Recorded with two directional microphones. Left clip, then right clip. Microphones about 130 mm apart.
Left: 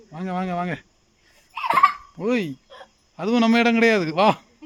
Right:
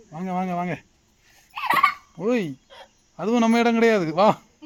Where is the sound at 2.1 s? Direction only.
15° left (ahead or behind).